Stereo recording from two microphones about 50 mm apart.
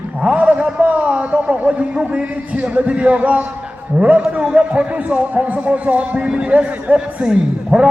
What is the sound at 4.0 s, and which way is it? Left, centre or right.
A woman's voice, right.